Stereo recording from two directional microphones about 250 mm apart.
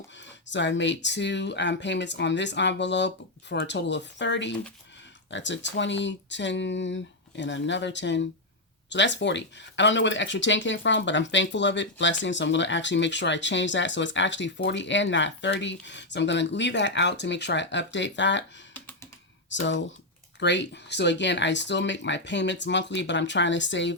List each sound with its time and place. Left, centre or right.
0.5 s speech: left
19.5 s speech: left